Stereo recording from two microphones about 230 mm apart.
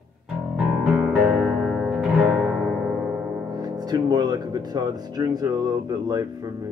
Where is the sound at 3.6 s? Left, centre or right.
Centre.